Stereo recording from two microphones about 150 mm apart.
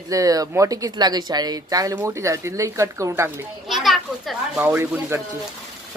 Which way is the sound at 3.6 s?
Centre (ahead or behind).